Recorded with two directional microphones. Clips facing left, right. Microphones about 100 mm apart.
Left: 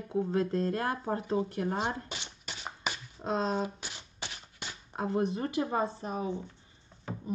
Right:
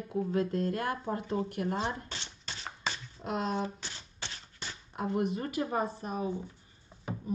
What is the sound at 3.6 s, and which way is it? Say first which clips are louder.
Typewriter: even; 15° left (ahead or behind).